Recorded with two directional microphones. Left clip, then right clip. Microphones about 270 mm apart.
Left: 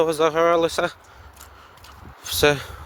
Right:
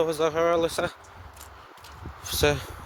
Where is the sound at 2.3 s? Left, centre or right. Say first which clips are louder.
Left 5 dB; left.